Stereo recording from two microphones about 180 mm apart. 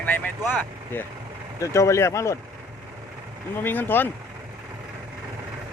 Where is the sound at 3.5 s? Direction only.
10° left (ahead or behind).